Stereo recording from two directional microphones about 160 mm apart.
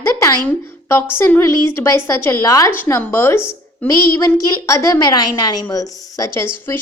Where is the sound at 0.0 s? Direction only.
20° left (ahead or behind).